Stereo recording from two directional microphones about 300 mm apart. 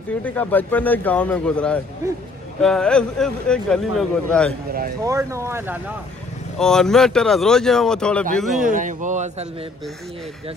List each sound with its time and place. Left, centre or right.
0.2 s speech: centre
5.0 s speech: centre
8.6 s speech: right